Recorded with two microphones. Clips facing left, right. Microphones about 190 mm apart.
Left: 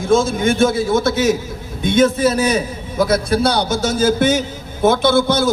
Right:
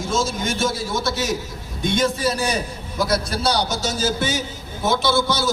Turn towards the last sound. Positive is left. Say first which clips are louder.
# left 6 dB
turn(degrees=55)  # may be behind; listen again after turning